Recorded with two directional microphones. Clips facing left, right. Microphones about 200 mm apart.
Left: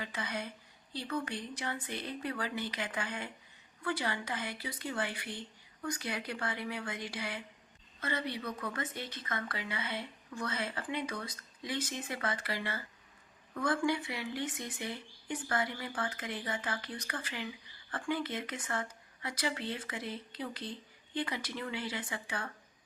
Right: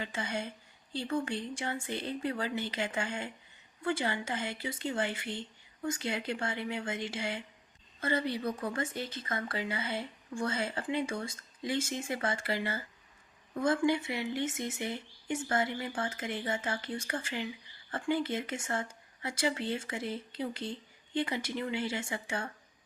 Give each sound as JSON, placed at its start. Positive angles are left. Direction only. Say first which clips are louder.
{"t": 0.0, "sound": "speech", "louder": "right 3 dB", "side_deg": -25}